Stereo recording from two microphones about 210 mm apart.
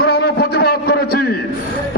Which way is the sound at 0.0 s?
50° left (ahead or behind).